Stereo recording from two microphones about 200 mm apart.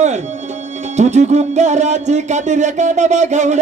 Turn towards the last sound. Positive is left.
turn(degrees=-35)  # may be behind; listen again after turning